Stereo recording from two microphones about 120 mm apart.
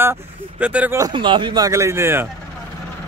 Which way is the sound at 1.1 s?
45° right (ahead or behind).